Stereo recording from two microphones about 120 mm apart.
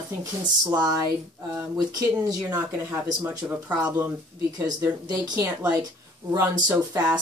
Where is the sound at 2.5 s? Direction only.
20° right (ahead or behind).